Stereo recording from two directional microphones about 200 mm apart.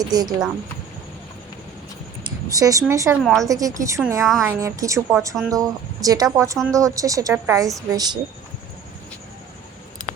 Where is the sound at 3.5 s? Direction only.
15° right (ahead or behind).